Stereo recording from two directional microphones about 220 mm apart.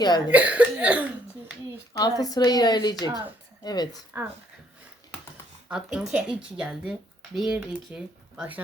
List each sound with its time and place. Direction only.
0.3 s speech: 5° right (ahead or behind)
1.9 s speech: 15° left (ahead or behind)
4.1 s speech: 10° right (ahead or behind)
5.6 s speech: 5° right (ahead or behind)